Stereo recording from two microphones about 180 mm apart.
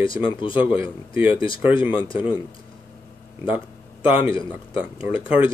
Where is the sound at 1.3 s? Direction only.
30° left (ahead or behind).